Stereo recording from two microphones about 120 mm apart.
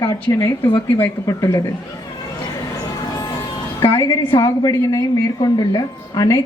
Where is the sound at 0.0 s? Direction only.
25° left (ahead or behind).